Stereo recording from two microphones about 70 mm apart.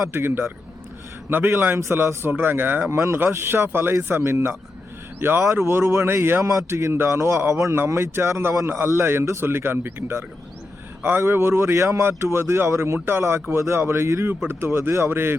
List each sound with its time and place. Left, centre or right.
0.1 s a man's voice: right
2.9 s speech: right
6.4 s a man's voice: right